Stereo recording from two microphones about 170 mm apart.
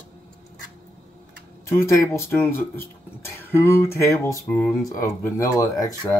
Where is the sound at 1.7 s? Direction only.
15° left (ahead or behind).